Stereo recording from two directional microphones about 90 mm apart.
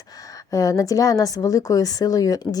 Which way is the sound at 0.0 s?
45° left (ahead or behind).